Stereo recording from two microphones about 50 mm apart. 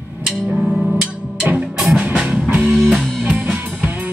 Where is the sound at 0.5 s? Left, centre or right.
Centre.